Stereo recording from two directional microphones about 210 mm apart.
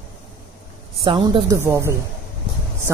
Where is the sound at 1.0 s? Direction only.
20° right (ahead or behind).